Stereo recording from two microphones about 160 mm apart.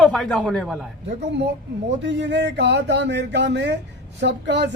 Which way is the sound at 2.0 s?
90° right.